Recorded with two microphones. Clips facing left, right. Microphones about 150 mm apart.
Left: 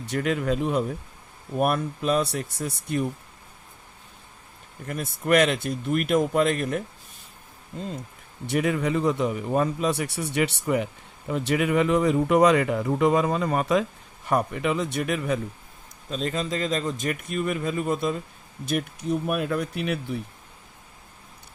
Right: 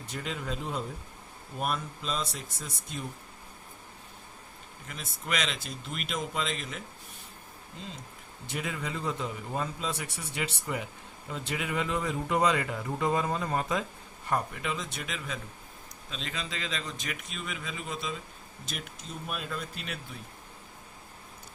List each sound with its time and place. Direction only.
0.0 s speech: 70° left (ahead or behind)
4.9 s speech: 55° left (ahead or behind)
8.4 s speech: 65° left (ahead or behind)
14.3 s speech: 65° left (ahead or behind)
16.0 s a man's voice: 45° left (ahead or behind); by 20.2 s 65° left (ahead or behind)